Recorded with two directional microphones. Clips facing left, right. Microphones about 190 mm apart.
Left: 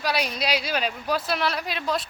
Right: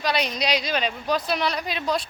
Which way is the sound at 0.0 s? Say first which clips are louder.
Right 1 dB; 5° left (ahead or behind).